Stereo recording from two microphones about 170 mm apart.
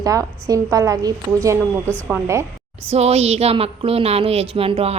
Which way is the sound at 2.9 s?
40° right (ahead or behind).